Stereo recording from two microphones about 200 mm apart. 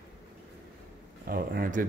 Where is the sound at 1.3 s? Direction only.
45° right (ahead or behind).